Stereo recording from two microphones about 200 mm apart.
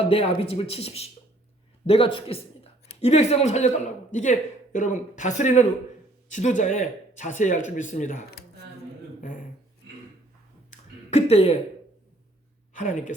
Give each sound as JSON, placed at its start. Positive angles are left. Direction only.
{"t": 0.0, "sound": "a man's voice", "side_deg": 30}
{"t": 10.7, "sound": "a sound", "side_deg": 30}
{"t": 12.7, "sound": "a woman's voice", "side_deg": 40}